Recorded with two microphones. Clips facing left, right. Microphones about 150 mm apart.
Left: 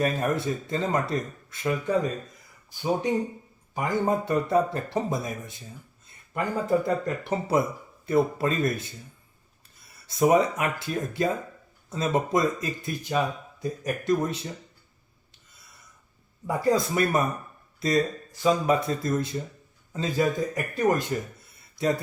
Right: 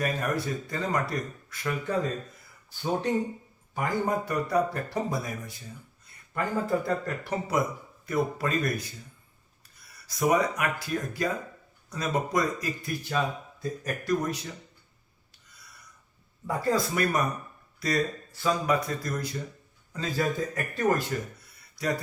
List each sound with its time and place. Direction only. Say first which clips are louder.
0.0 s speech: left 4 dB; 25° left (ahead or behind)
3.8 s a man's voice: left 3 dB; 25° left (ahead or behind)
16.5 s a man's voice: left 3 dB; 20° left (ahead or behind)
21.1 s a sound: left 3 dB; 25° left (ahead or behind)